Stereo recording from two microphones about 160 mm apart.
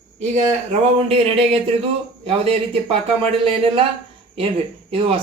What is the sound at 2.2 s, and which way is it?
Speech, 35° right (ahead or behind).